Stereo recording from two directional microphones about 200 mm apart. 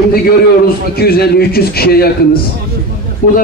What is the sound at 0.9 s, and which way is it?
A man's voice, 50° left (ahead or behind).